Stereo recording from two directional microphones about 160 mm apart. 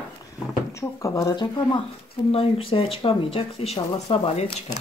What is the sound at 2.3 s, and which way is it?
Speech, 35° left (ahead or behind).